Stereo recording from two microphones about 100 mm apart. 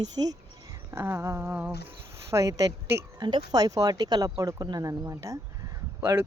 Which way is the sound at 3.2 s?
50° right (ahead or behind).